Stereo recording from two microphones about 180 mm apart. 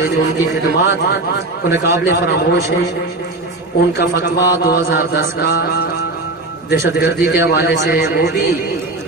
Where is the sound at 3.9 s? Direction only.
65° left (ahead or behind).